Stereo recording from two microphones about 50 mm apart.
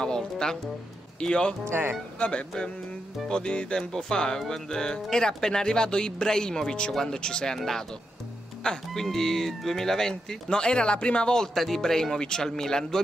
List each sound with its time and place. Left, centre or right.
0.0 s speech: centre
1.2 s music: centre
1.7 s speech: right
2.1 s speech: left
3.3 s music: centre
3.9 s speech: centre
11.5 s speech: centre